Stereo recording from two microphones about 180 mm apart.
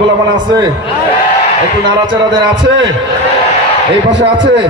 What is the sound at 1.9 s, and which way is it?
Music, 25° right (ahead or behind).